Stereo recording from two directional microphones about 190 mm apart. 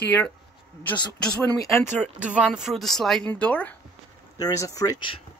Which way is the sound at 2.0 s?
5° right (ahead or behind).